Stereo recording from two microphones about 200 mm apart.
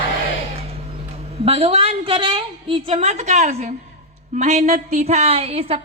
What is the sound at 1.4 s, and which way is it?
A woman's voice, 30° right (ahead or behind).